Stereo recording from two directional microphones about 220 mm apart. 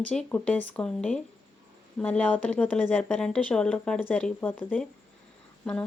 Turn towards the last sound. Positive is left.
turn(degrees=5)  # may be behind; listen again after turning